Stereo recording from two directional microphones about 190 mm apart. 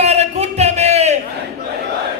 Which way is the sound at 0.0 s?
35° right (ahead or behind).